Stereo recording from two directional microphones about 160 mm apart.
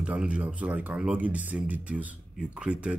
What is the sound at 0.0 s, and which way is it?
Speech, 5° right (ahead or behind).